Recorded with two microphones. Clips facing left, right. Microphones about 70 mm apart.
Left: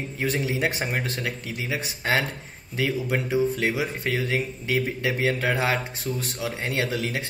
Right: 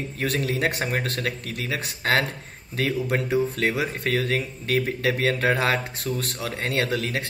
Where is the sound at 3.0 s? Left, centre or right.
Centre.